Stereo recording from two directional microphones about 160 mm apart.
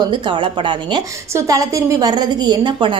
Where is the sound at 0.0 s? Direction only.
30° right (ahead or behind).